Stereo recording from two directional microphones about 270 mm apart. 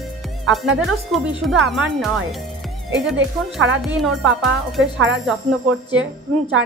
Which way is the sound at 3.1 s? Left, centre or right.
Right.